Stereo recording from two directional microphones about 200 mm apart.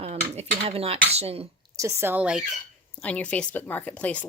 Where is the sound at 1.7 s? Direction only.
15° right (ahead or behind).